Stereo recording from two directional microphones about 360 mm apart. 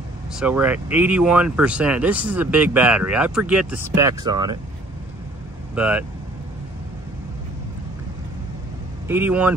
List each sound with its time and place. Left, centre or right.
0.4 s speech: centre
5.8 s speech: centre
9.0 s speech: centre